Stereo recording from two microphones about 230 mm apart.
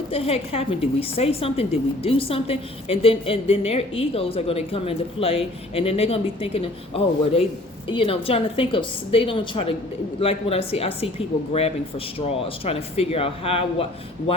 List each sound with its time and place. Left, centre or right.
0.1 s a woman's voice: left